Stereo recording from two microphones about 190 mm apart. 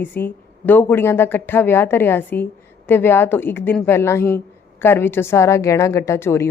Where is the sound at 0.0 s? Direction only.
10° left (ahead or behind).